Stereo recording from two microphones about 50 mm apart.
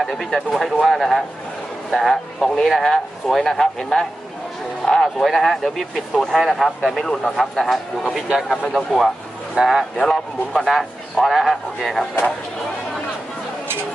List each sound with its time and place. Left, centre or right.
0.0 s a man's voice: centre
2.4 s speech: centre
5.2 s a man's voice: centre
7.0 s a man's voice: centre
9.6 s speech: centre
10.0 s a man's voice: centre